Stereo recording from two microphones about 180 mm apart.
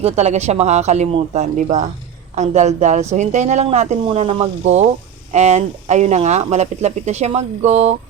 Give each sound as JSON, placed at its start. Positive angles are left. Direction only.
{"t": 0.0, "sound": "speech", "side_deg": -35}